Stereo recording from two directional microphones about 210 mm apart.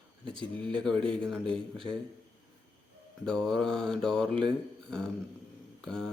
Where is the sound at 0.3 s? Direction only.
5° left (ahead or behind).